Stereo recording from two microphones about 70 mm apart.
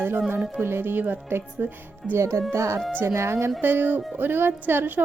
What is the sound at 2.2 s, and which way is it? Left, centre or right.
Speech, right.